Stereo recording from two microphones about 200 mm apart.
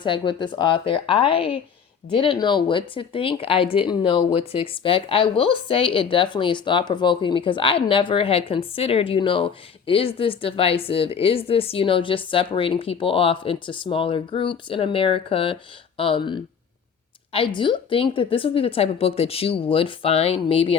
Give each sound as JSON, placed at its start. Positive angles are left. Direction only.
{"t": 0.0, "sound": "speech", "side_deg": 25}